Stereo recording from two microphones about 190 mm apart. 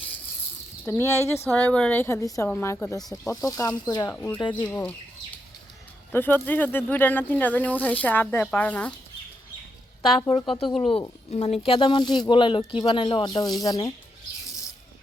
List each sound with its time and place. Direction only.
0.9 s speech: 15° left (ahead or behind)
4.1 s speech: 10° left (ahead or behind)
4.4 s speech: 25° left (ahead or behind)
4.6 s speech: 10° left (ahead or behind)
6.1 s speech: 10° left (ahead or behind)
10.2 s speech: 25° left (ahead or behind)